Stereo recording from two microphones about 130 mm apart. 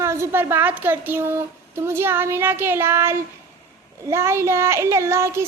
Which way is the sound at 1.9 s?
20° right (ahead or behind).